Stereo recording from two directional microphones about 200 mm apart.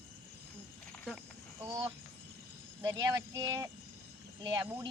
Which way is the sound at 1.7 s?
15° right (ahead or behind).